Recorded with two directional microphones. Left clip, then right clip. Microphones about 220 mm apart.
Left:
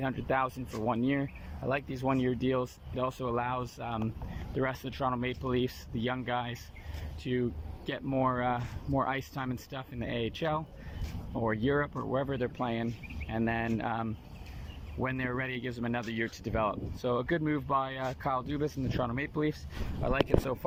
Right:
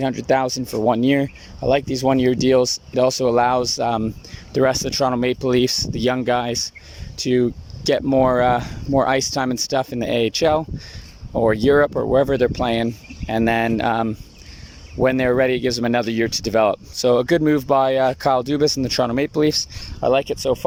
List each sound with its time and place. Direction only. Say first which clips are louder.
0.0 s speech: right 12 dB; 35° right (ahead or behind)
20.0 s speech: right 13 dB; 35° right (ahead or behind)